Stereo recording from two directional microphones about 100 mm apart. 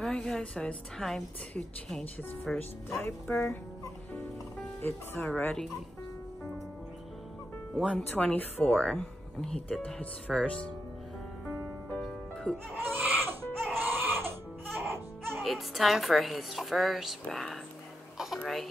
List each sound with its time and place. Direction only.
0.0 s a woman's voice: 5° left (ahead or behind)
3.0 s speech: 25° left (ahead or behind)
4.8 s speech: 20° left (ahead or behind)
7.7 s speech: 5° left (ahead or behind)
12.0 s music: 5° left (ahead or behind)
12.7 s baby cry: 20° right (ahead or behind)
14.8 s music: 20° right (ahead or behind)
15.4 s a woman's voice: centre (ahead or behind)
18.1 s a sound: 5° right (ahead or behind)
18.4 s speech: centre (ahead or behind)